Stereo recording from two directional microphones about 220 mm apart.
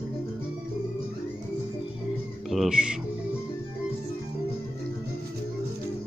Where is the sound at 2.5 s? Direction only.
Centre (ahead or behind).